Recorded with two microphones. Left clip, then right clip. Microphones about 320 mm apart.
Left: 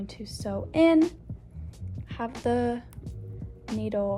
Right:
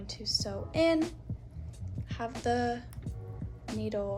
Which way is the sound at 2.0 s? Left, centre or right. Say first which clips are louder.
Left 3 dB; centre.